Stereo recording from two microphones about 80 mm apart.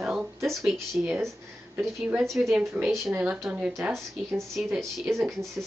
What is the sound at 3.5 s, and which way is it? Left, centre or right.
Speech, centre.